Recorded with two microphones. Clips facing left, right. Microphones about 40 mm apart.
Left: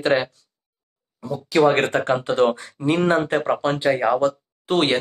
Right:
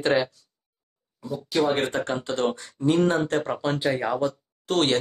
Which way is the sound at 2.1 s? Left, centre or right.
Left.